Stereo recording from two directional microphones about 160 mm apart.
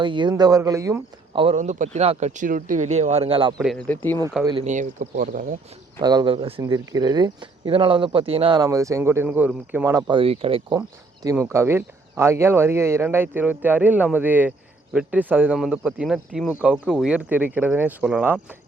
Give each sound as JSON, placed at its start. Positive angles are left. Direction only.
{"t": 0.0, "sound": "speech", "side_deg": -30}
{"t": 1.5, "sound": "speech", "side_deg": -50}
{"t": 3.8, "sound": "speech", "side_deg": 10}
{"t": 4.6, "sound": "speech", "side_deg": -50}
{"t": 6.0, "sound": "speech", "side_deg": -25}
{"t": 8.5, "sound": "speech", "side_deg": -20}
{"t": 10.1, "sound": "speech", "side_deg": -35}
{"t": 10.8, "sound": "speech", "side_deg": -20}